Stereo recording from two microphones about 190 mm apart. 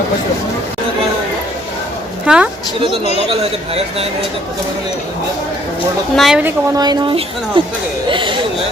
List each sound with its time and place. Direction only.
2.2 s speech: 5° right (ahead or behind)
6.1 s a woman's voice: 5° right (ahead or behind)
6.7 s speech: 20° right (ahead or behind)